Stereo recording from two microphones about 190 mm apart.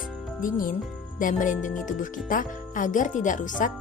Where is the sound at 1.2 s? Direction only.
40° left (ahead or behind).